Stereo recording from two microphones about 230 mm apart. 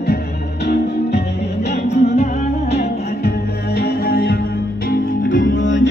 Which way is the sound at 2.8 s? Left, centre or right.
Left.